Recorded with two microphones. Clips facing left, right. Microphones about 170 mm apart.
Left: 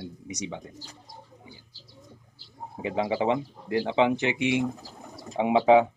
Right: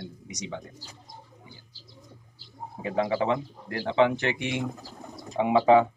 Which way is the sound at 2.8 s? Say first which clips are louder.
Even; 15° left (ahead or behind).